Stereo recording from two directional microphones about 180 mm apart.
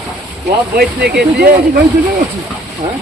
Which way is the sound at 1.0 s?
65° right (ahead or behind).